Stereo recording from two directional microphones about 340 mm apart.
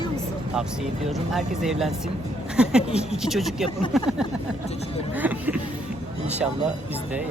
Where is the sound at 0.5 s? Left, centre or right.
Centre.